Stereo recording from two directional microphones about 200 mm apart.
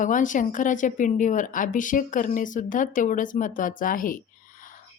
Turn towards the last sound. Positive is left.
turn(degrees=45)  # may be behind; listen again after turning